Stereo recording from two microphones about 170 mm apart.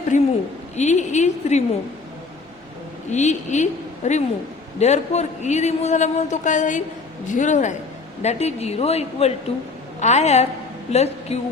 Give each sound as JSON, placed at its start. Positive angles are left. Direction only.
{"t": 0.1, "sound": "a man's voice", "side_deg": 45}
{"t": 3.1, "sound": "a man's voice", "side_deg": 45}